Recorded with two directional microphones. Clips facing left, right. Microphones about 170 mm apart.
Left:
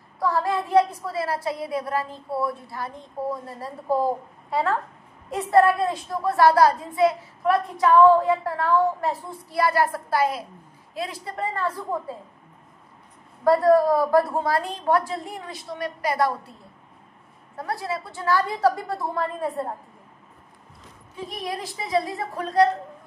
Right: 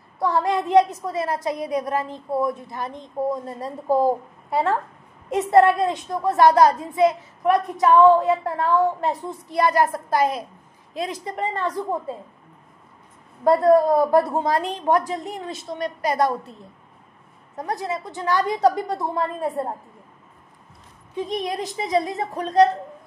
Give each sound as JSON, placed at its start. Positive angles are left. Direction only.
{"t": 0.2, "sound": "a child's voice", "side_deg": -20}
{"t": 13.4, "sound": "a child's voice", "side_deg": -25}
{"t": 17.6, "sound": "a child's voice", "side_deg": -20}
{"t": 21.2, "sound": "a child's voice", "side_deg": -20}